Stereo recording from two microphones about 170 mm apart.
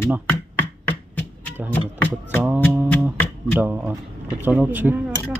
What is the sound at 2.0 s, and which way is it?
Speech, 15° left (ahead or behind).